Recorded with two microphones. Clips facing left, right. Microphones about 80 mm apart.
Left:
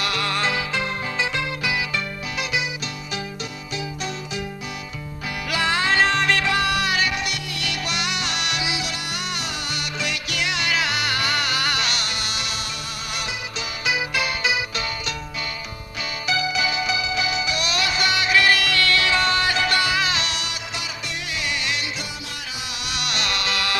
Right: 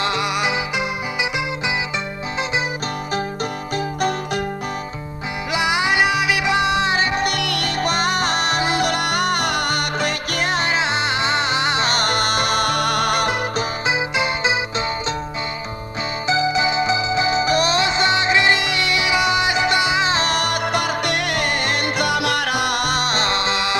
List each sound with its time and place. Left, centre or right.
0.0 s music: right
5.5 s music: centre
7.3 s music: right
7.8 s music: right
11.9 s music: right
13.8 s music: right
16.2 s music: right
20.2 s music: right